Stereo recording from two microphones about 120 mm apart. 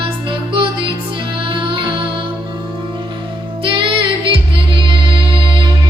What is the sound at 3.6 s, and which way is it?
Music, 45° right (ahead or behind).